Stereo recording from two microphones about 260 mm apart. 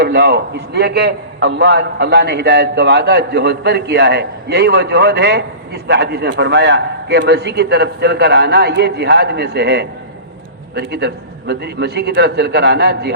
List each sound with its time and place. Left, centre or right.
0.0 s a man's voice: right